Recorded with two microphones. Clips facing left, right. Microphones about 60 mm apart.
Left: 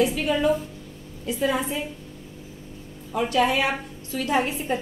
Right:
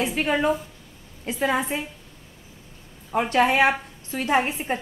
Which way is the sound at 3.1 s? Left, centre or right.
Right.